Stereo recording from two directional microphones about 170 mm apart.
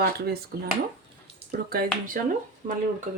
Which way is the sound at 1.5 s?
60° right (ahead or behind).